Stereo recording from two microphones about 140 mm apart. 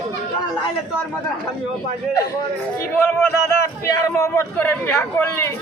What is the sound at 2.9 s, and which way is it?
A man's voice, 10° left (ahead or behind).